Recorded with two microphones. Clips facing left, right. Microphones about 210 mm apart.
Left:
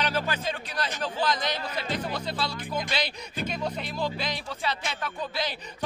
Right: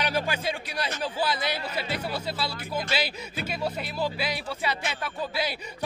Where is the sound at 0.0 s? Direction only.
10° right (ahead or behind).